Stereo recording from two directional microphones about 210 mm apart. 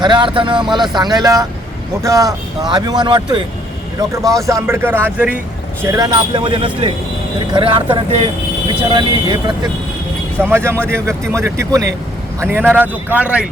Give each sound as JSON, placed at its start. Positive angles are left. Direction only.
{"t": 0.0, "sound": "speech", "side_deg": -20}
{"t": 4.2, "sound": "speech", "side_deg": 0}
{"t": 4.4, "sound": "speech", "side_deg": -10}
{"t": 10.4, "sound": "speech", "side_deg": -10}